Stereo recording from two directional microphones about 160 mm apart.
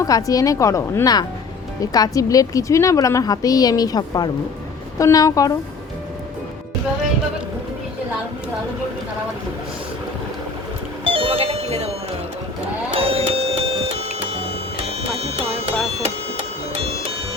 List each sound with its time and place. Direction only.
0.0 s a woman's voice: 20° left (ahead or behind)
11.0 s music: 35° right (ahead or behind)
12.9 s a sound: 35° right (ahead or behind)
16.0 s music: 45° right (ahead or behind)